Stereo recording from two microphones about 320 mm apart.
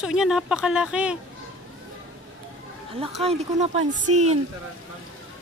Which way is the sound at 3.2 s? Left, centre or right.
Centre.